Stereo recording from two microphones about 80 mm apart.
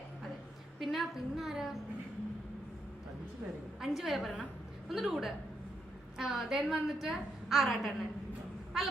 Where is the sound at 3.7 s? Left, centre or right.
Centre.